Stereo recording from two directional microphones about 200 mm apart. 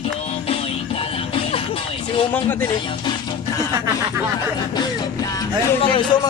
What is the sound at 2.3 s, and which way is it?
Speech, 10° left (ahead or behind).